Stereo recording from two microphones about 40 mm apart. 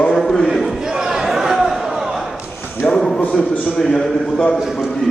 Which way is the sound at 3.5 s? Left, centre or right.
Left.